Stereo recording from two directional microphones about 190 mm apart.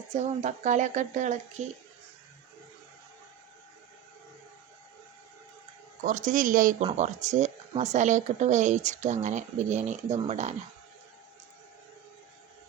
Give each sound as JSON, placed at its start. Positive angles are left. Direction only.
{"t": 0.1, "sound": "speech", "side_deg": -40}
{"t": 6.1, "sound": "speech", "side_deg": -40}